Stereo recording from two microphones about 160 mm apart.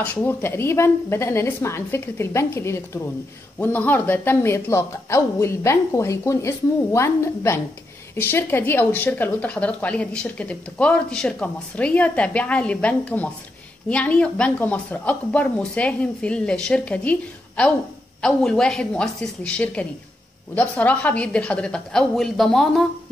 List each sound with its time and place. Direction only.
0.0 s a woman's voice: 10° left (ahead or behind)